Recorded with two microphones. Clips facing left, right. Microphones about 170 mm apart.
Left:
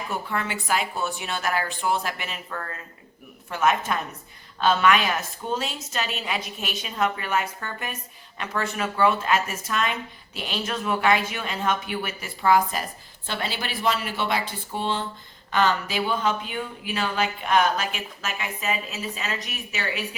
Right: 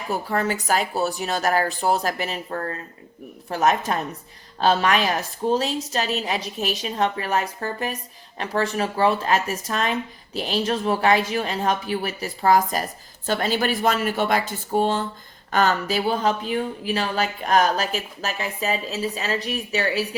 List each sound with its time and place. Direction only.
0.1 s speech: 40° right (ahead or behind)